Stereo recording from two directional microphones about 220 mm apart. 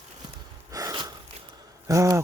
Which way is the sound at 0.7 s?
15° right (ahead or behind).